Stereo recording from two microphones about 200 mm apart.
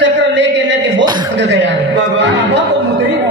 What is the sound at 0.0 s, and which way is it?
A man's voice, 65° right (ahead or behind).